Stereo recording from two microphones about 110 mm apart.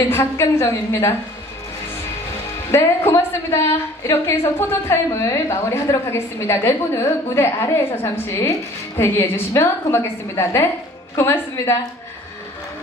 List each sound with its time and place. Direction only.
0.1 s a woman's voice: 25° left (ahead or behind)
2.7 s a woman's voice: 25° left (ahead or behind)